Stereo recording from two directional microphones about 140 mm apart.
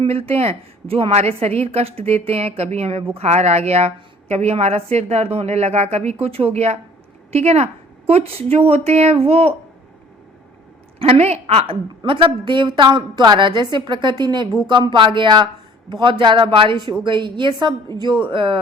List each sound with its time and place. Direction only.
0.0 s a woman's voice: 45° right (ahead or behind)
11.0 s a woman's voice: 50° right (ahead or behind)